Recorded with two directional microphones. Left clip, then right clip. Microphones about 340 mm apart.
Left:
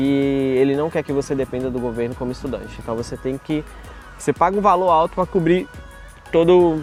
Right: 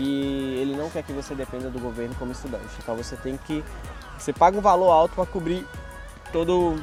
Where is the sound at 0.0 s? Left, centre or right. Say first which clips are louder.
Left 8 dB; left.